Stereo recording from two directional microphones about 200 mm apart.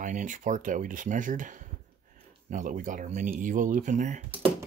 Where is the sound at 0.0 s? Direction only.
40° right (ahead or behind).